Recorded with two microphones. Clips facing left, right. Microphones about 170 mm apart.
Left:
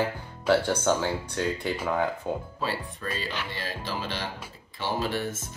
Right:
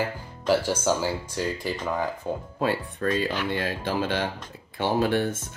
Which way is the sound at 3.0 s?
50° right (ahead or behind).